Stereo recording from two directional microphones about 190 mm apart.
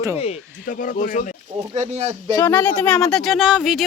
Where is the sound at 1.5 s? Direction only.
35° right (ahead or behind).